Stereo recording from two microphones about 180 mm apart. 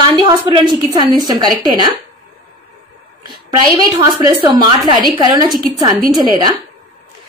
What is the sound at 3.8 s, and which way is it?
Speech, 20° right (ahead or behind).